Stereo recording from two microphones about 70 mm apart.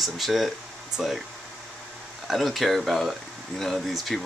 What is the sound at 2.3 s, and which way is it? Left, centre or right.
Speech, centre.